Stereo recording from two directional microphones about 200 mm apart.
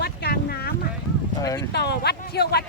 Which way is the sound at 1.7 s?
55° left (ahead or behind).